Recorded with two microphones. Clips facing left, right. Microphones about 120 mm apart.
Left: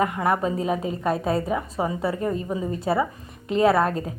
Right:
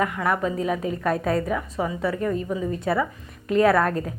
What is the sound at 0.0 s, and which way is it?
A woman's voice, 25° left (ahead or behind).